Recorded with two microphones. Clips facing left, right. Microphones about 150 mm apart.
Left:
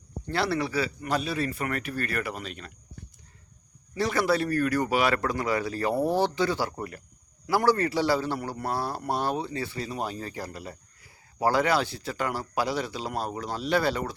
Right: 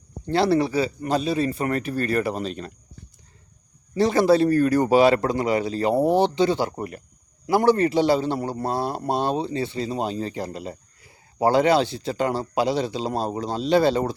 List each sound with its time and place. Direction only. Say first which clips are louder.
0.3 s a man's voice: right 8 dB; 25° right (ahead or behind)
3.9 s a man's voice: right 8 dB; 25° right (ahead or behind)